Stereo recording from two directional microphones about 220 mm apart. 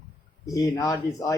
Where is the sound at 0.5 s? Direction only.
15° left (ahead or behind).